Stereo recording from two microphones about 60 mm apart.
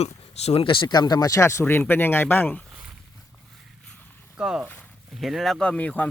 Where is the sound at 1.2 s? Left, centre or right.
Left.